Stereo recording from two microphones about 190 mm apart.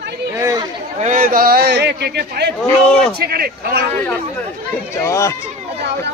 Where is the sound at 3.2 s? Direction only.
55° right (ahead or behind).